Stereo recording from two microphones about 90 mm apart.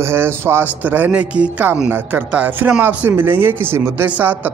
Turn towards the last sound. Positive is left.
turn(degrees=-20)  # may be behind; listen again after turning